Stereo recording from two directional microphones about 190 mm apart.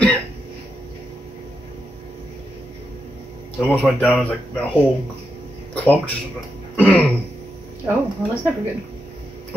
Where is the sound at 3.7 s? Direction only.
5° left (ahead or behind).